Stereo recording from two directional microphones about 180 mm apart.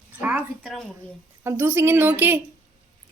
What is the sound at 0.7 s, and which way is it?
Speech, centre (ahead or behind).